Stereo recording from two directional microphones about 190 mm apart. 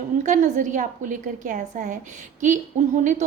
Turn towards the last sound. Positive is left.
turn(degrees=-40)  # may be behind; listen again after turning